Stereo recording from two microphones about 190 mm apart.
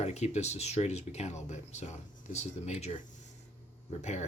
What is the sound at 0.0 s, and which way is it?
Speech, 35° left (ahead or behind).